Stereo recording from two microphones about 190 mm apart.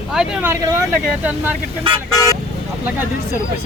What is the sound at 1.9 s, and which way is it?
Speech, 25° right (ahead or behind).